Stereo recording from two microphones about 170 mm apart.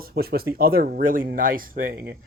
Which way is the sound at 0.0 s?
65° right (ahead or behind).